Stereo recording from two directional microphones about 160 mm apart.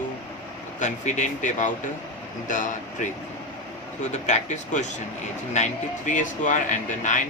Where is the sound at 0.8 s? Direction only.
50° left (ahead or behind).